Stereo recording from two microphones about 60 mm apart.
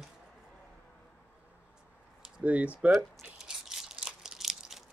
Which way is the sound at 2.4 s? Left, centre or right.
Right.